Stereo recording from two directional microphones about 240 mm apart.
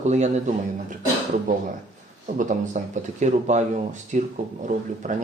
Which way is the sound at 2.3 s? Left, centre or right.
Right.